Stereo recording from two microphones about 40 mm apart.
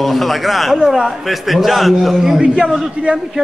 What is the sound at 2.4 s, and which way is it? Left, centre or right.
Speech, right.